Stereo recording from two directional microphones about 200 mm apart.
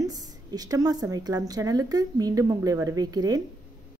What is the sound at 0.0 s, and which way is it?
A woman's voice, 20° right (ahead or behind).